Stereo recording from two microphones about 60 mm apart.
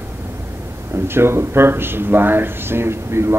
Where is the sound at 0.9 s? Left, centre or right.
Right.